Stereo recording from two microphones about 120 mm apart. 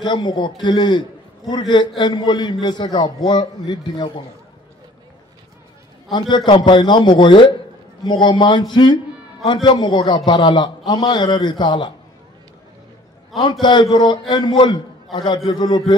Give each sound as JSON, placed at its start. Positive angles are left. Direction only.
{"t": 0.0, "sound": "a man's voice", "side_deg": 40}
{"t": 6.0, "sound": "a man's voice", "side_deg": 40}
{"t": 13.4, "sound": "a man's voice", "side_deg": 40}